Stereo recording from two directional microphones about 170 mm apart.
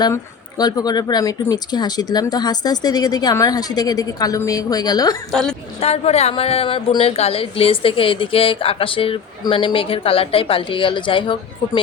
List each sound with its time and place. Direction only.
0.0 s speech: 25° left (ahead or behind)
5.3 s a woman's voice: 5° left (ahead or behind)
5.8 s a woman's voice: 40° left (ahead or behind)